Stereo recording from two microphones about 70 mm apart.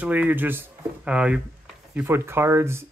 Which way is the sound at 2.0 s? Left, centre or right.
Right.